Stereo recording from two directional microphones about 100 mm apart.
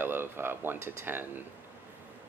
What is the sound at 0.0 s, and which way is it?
Speech, 20° right (ahead or behind).